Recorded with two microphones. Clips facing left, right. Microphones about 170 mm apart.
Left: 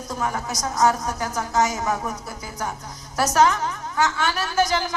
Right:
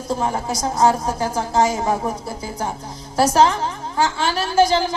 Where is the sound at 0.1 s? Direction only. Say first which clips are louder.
Right 5 dB; 30° right (ahead or behind).